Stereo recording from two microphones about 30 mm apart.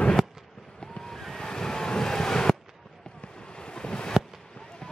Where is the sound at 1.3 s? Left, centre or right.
Left.